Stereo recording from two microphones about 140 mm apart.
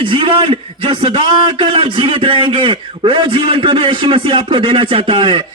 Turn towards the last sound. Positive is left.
turn(degrees=-35)  # may be behind; listen again after turning